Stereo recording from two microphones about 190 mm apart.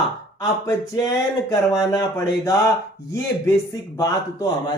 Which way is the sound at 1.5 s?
15° left (ahead or behind).